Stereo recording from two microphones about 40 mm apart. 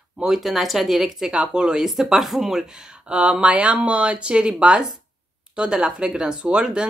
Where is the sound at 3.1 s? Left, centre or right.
Right.